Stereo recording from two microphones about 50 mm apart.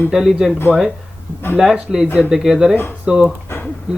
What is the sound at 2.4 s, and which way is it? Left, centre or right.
Speech, centre.